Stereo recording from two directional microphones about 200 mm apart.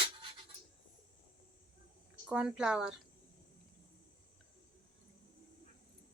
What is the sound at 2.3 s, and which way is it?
Speech, 5° right (ahead or behind).